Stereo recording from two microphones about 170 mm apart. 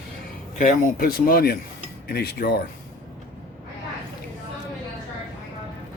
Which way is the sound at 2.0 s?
70° left (ahead or behind).